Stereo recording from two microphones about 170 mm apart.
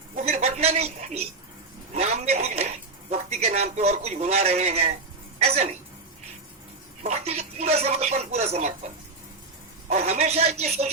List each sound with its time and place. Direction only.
0.2 s a sound: 40° right (ahead or behind)
7.0 s speech: 40° right (ahead or behind)
9.9 s speech: 40° right (ahead or behind)